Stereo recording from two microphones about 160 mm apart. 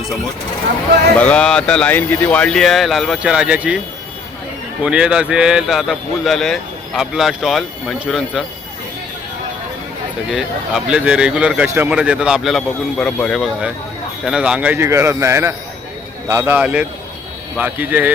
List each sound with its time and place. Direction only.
1.2 s speech: 5° left (ahead or behind)
4.8 s speech: 5° right (ahead or behind)
10.3 s a man's voice: 5° right (ahead or behind)